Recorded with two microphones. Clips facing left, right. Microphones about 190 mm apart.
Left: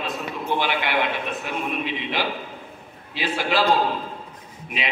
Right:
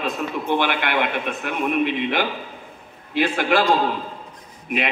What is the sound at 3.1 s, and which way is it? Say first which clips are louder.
Speech: right 5 dB; 55° right (ahead or behind).